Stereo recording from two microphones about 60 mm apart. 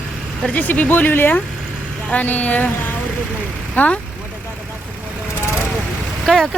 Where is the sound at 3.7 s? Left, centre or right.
Left.